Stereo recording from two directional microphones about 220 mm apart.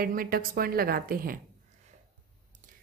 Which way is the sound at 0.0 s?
40° right (ahead or behind).